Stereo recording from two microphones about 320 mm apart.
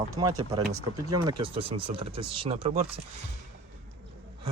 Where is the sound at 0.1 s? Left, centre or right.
Centre.